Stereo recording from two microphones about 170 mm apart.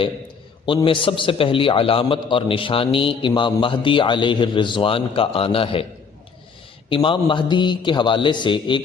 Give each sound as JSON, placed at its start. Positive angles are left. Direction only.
{"t": 0.6, "sound": "a man's voice", "side_deg": 30}
{"t": 6.9, "sound": "a man's voice", "side_deg": 30}